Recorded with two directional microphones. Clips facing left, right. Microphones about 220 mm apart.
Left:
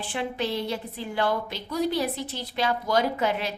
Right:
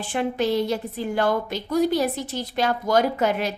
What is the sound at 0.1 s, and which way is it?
A woman's voice, 45° right (ahead or behind).